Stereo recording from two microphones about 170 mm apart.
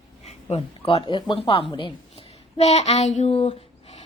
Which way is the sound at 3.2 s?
35° left (ahead or behind).